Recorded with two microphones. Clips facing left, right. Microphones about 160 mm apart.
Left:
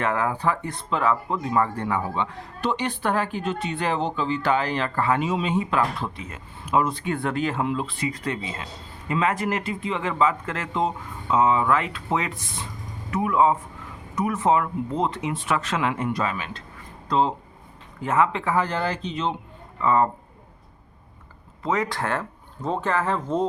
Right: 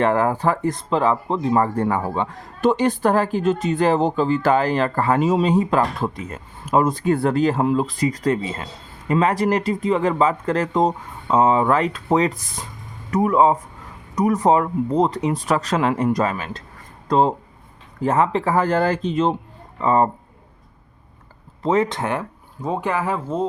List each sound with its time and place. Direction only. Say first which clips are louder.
0.0 s speech: right 6 dB; 35° right (ahead or behind)
18.0 s speech: right 4 dB; 35° right (ahead or behind)
19.8 s speech: right 3 dB; 35° right (ahead or behind)
21.6 s speech: right 6 dB; 30° right (ahead or behind); by 23.5 s 5° right (ahead or behind)